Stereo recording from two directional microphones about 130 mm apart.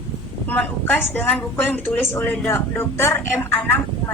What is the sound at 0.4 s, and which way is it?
A woman's voice, 10° left (ahead or behind).